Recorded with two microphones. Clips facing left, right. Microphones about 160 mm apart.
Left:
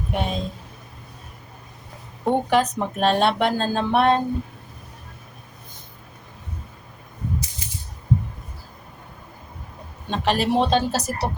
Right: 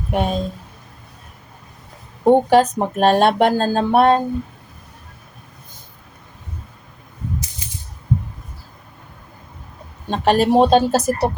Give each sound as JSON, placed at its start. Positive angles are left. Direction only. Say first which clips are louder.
{"t": 0.1, "sound": "a woman's voice", "louder": "right 6 dB", "side_deg": -45}
{"t": 2.2, "sound": "speech", "louder": "right 7 dB", "side_deg": -40}
{"t": 10.1, "sound": "a woman's voice", "louder": "right 6 dB", "side_deg": -45}